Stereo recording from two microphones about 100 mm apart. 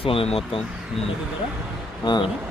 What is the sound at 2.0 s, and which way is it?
Speech, 50° left (ahead or behind).